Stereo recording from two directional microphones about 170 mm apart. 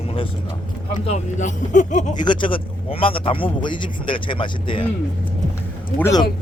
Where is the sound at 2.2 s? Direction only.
30° left (ahead or behind).